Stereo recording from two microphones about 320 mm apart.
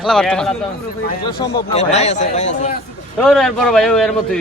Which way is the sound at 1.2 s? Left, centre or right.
Centre.